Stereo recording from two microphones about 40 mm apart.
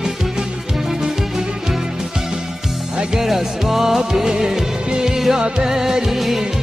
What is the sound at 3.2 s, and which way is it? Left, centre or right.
Music, centre.